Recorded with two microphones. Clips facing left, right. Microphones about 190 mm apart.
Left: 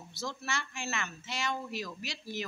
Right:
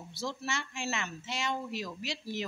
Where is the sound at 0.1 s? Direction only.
25° right (ahead or behind).